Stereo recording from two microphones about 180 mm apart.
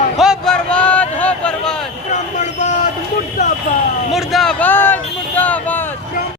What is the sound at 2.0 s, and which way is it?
Vehicle, 40° left (ahead or behind).